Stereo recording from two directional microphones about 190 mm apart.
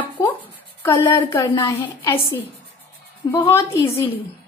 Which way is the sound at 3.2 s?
10° left (ahead or behind).